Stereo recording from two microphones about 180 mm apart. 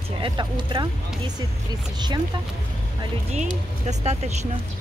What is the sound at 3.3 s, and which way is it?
Speech, 40° right (ahead or behind).